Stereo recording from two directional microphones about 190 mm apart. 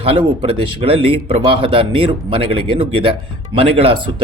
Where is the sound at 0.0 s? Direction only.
30° right (ahead or behind).